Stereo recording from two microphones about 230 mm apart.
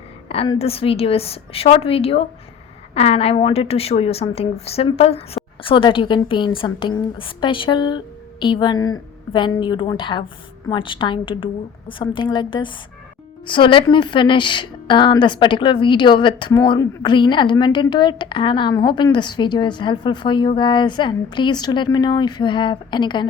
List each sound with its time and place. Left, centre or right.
0.3 s a woman's voice: left